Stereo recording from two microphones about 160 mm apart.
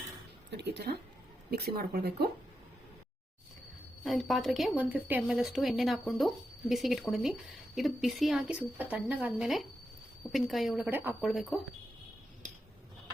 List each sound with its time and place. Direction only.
0.5 s speech: 90° right
1.5 s speech: 75° right (ahead or behind)
4.0 s speech: centre (ahead or behind)
10.8 s speech: 10° right (ahead or behind)
11.2 s speech: centre (ahead or behind)